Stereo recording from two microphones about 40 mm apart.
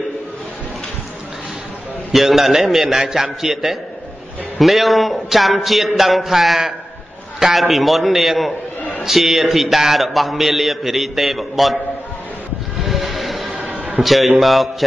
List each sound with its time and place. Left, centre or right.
2.1 s a man's voice: centre
4.6 s a man's voice: centre
13.1 s music: centre
13.5 s a sound: right
14.0 s a man's voice: centre